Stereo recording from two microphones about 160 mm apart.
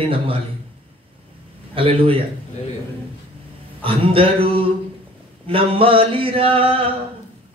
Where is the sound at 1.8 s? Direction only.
35° right (ahead or behind).